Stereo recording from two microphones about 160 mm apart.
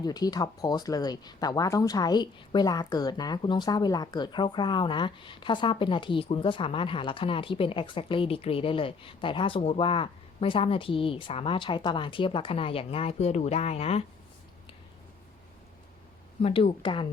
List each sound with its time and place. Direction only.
0.0 s speech: 25° left (ahead or behind); by 14.0 s 40° left (ahead or behind)
16.4 s speech: 35° left (ahead or behind)